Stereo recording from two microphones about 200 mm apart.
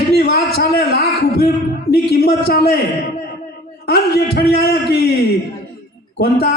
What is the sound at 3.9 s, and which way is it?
A man's voice, 55° left (ahead or behind).